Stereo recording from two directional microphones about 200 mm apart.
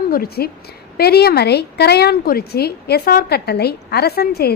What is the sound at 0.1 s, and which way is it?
A woman's voice, 50° left (ahead or behind).